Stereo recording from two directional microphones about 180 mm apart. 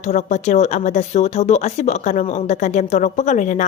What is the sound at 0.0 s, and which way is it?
A woman's voice, 40° left (ahead or behind).